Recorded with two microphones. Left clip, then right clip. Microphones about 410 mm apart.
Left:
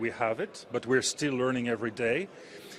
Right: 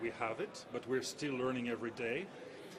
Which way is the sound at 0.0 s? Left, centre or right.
Left.